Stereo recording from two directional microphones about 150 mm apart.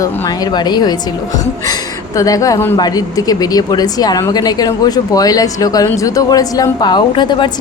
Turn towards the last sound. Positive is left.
turn(degrees=30)  # may be behind; listen again after turning